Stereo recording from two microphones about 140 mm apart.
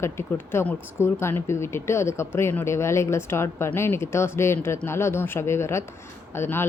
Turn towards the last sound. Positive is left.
turn(degrees=15)  # may be behind; listen again after turning